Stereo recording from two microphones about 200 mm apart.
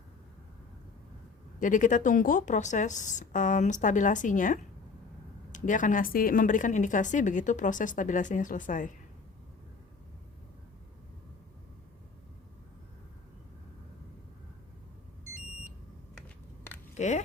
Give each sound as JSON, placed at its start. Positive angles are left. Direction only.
{"t": 1.5, "sound": "a woman's voice", "side_deg": 40}
{"t": 16.9, "sound": "speech", "side_deg": 35}